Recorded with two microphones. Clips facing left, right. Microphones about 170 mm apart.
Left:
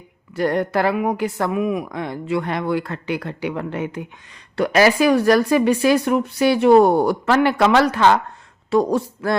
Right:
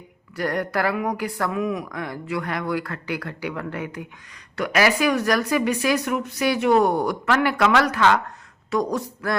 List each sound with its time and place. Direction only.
0.3 s speech: 25° left (ahead or behind)